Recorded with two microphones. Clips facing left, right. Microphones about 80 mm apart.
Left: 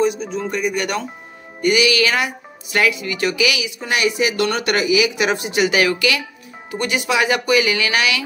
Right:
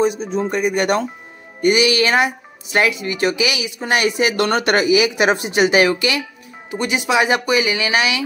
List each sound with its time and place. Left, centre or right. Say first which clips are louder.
0.0 s speech: right 1 dB; right